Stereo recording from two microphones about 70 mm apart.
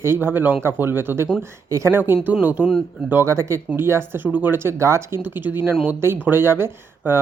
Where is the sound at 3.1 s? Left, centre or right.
Right.